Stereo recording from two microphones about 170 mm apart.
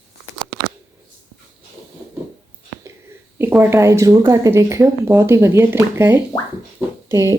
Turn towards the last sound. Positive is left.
turn(degrees=-20)  # may be behind; listen again after turning